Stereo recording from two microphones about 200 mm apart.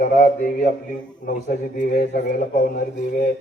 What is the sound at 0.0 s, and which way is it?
Speech, 40° left (ahead or behind).